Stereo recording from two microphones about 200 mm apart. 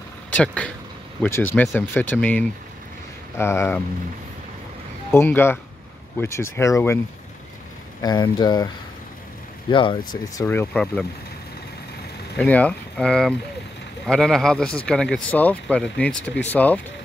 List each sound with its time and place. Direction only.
0.3 s speech: 5° left (ahead or behind)
5.1 s speech: 10° left (ahead or behind)
8.0 s speech: 20° left (ahead or behind)
9.7 s speech: 25° left (ahead or behind)
10.4 s speech: 10° left (ahead or behind)
12.4 s speech: 5° left (ahead or behind)